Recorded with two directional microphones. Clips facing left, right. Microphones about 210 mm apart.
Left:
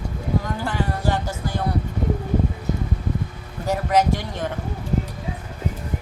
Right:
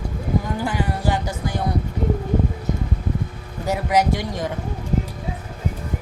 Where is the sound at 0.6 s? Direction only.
10° right (ahead or behind).